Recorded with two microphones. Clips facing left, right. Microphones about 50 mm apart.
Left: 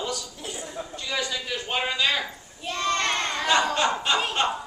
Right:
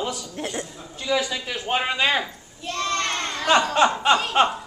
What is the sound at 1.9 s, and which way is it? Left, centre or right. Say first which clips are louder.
Speech: right 2 dB; right.